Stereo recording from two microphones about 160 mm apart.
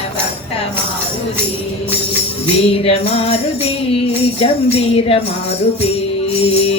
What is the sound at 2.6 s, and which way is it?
Speech, 40° left (ahead or behind).